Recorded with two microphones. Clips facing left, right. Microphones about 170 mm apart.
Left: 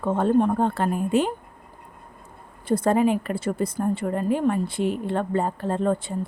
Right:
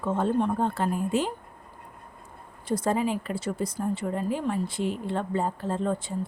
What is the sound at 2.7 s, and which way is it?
A woman's voice, 55° left (ahead or behind).